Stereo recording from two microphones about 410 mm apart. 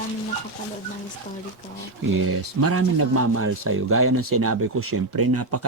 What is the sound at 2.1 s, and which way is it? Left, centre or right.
Speech, right.